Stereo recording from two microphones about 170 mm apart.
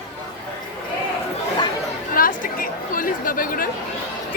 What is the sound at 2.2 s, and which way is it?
Chatter, 55° left (ahead or behind).